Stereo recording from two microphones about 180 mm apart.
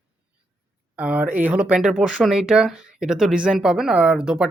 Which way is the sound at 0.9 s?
5° right (ahead or behind).